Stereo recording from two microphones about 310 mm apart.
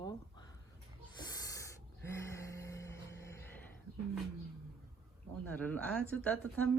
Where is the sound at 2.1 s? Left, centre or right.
Centre.